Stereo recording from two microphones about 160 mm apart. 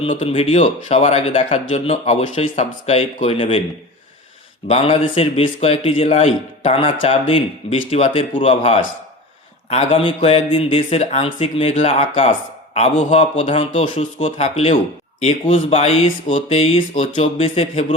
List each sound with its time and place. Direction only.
0.2 s a man's voice: 35° left (ahead or behind)
4.7 s a man's voice: 35° left (ahead or behind)